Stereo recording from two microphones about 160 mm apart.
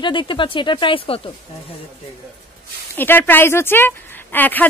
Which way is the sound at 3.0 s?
10° left (ahead or behind).